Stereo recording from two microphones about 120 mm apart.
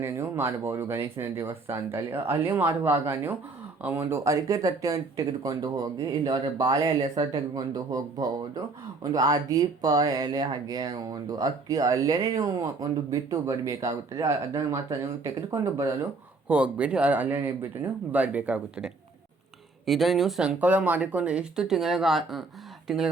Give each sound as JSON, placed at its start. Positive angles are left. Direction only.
{"t": 0.0, "sound": "speech", "side_deg": -20}
{"t": 16.5, "sound": "speech", "side_deg": -10}